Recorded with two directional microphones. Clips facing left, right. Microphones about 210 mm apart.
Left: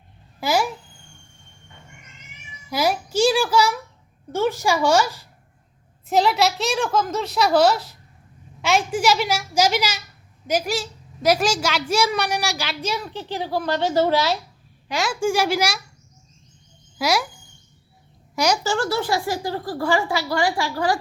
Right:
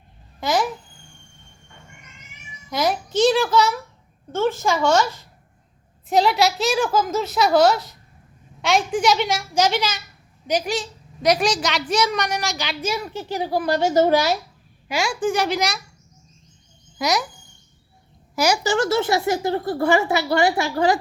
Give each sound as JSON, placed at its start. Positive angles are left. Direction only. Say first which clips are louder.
{"t": 0.3, "sound": "babbling", "louder": "even", "side_deg": 10}
{"t": 2.6, "sound": "a child's voice", "louder": "even", "side_deg": 5}
{"t": 6.1, "sound": "a woman's voice", "louder": "right 1 dB", "side_deg": 0}
{"t": 12.8, "sound": "a woman's voice", "louder": "right 3 dB", "side_deg": -10}
{"t": 14.8, "sound": "a woman's voice", "louder": "even", "side_deg": 0}
{"t": 18.3, "sound": "a woman's voice", "louder": "right 1 dB", "side_deg": -5}
{"t": 18.6, "sound": "speech", "louder": "right 3 dB", "side_deg": -20}